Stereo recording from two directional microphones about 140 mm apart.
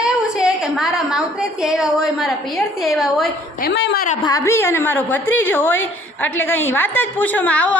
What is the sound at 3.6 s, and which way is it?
Speech, 90° left.